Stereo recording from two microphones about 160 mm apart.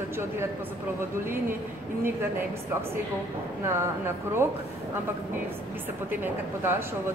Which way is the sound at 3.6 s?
15° right (ahead or behind).